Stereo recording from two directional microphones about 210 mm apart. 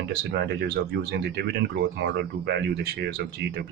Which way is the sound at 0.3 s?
50° right (ahead or behind).